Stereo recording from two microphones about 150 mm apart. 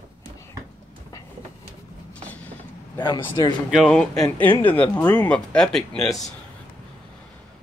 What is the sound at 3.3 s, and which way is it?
Speech, 30° left (ahead or behind).